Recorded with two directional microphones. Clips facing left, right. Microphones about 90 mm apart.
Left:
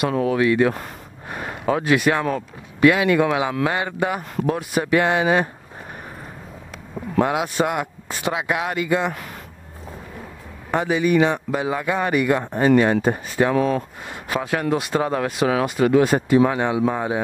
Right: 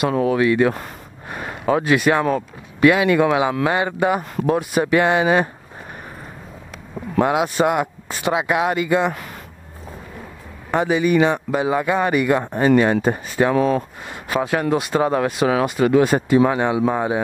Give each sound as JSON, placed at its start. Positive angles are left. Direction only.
{"t": 0.0, "sound": "speech", "side_deg": -15}
{"t": 7.2, "sound": "speech", "side_deg": -20}
{"t": 10.8, "sound": "speech", "side_deg": -15}